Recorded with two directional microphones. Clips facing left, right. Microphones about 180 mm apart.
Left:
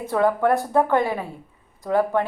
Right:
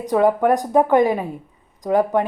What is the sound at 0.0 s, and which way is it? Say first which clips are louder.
Speech: right 3 dB; 15° right (ahead or behind).